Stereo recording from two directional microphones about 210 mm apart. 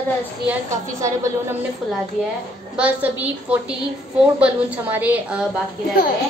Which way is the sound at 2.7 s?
5° right (ahead or behind).